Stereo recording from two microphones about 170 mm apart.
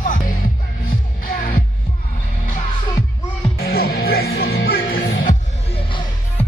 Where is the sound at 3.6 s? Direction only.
65° left (ahead or behind).